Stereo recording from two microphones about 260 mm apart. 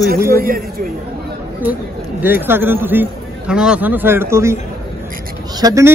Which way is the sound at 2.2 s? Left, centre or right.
Centre.